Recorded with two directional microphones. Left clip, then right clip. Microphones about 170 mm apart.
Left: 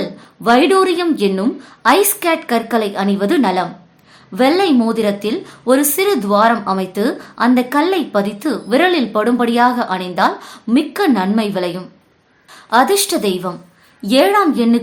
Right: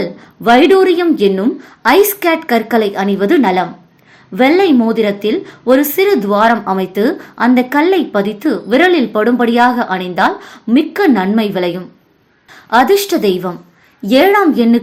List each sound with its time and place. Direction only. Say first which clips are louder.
0.0 s a woman's voice: right 3 dB; 10° right (ahead or behind)